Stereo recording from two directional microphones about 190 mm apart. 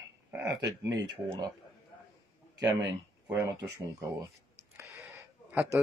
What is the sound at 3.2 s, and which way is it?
Speech, 15° right (ahead or behind).